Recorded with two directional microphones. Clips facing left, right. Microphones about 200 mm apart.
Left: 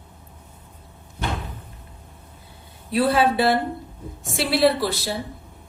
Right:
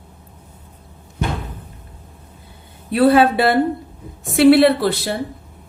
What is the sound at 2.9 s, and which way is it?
Speech, 60° right (ahead or behind).